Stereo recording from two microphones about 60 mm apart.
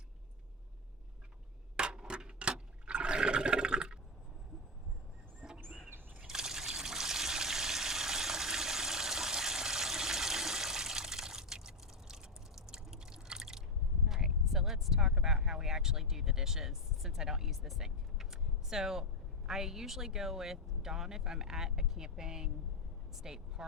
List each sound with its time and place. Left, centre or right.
1.7 s toilet flush: centre
6.1 s trickle: centre
14.1 s a sound: centre
19.5 s speech: centre